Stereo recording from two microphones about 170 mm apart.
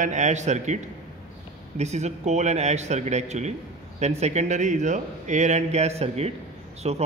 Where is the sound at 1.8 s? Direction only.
40° right (ahead or behind).